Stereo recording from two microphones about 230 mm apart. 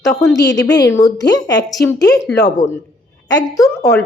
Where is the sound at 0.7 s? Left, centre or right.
Centre.